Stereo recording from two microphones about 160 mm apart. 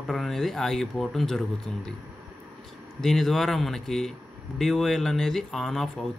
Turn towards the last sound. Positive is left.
turn(degrees=0)  # may be behind; listen again after turning